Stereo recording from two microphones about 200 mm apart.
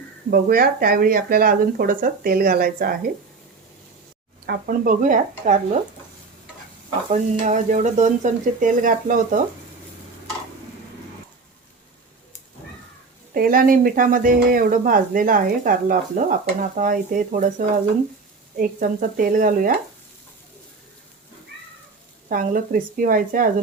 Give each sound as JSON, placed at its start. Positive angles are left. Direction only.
{"t": 0.3, "sound": "speech", "side_deg": -50}
{"t": 4.4, "sound": "speech", "side_deg": -45}
{"t": 7.1, "sound": "speech", "side_deg": -40}
{"t": 13.3, "sound": "speech", "side_deg": -45}
{"t": 18.5, "sound": "speech", "side_deg": -40}
{"t": 22.3, "sound": "speech", "side_deg": -45}